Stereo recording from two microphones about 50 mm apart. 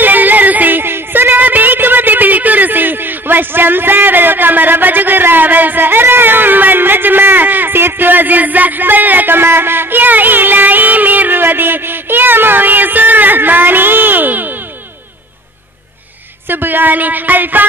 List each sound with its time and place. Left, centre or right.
0.0 s music: right
16.4 s speech: right